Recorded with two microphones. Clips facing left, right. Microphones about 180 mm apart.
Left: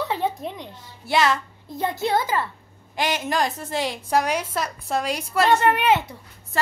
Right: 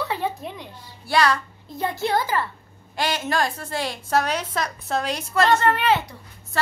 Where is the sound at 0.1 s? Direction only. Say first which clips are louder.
Left 2 dB; 20° left (ahead or behind).